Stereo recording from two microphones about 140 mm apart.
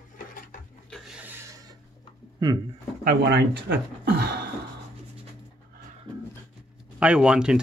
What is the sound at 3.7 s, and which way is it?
Beatboxing, 90° right.